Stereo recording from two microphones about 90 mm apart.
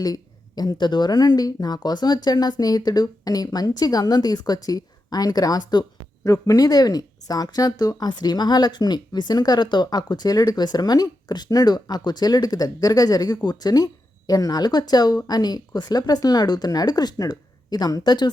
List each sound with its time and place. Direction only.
0.0 s speech: 45° left (ahead or behind)